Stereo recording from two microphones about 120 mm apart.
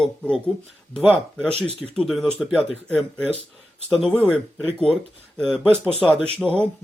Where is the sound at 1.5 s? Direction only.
60° right (ahead or behind).